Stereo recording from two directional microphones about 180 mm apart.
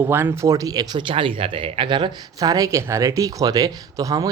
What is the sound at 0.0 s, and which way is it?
Speech, 10° right (ahead or behind).